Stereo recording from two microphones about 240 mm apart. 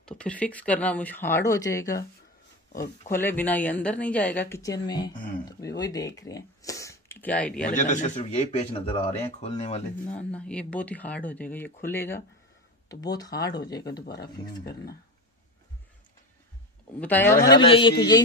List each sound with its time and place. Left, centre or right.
0.0 s speech: centre
3.1 s speech: centre
7.6 s speech: left
10.1 s speech: centre
14.0 s speech: left
17.0 s speech: centre
17.5 s speech: left